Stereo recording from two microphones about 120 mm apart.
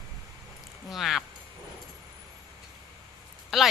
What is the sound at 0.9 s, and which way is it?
Speech, centre (ahead or behind).